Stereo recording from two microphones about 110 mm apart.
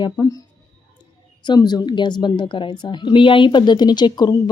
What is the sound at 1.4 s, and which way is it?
A woman's voice, 40° left (ahead or behind).